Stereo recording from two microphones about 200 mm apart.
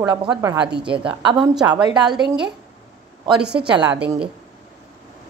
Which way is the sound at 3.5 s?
5° right (ahead or behind).